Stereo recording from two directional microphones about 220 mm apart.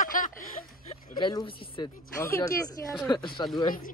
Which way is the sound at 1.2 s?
20° left (ahead or behind).